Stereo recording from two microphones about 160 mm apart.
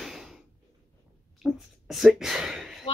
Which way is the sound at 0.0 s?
Centre (ahead or behind).